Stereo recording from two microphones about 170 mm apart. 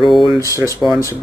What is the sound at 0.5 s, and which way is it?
Speech, 20° right (ahead or behind).